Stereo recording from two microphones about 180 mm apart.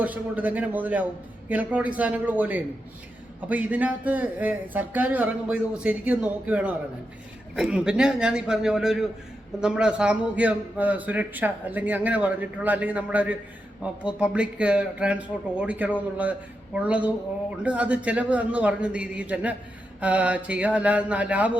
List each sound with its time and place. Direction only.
0.0 s a man's voice: 10° right (ahead or behind)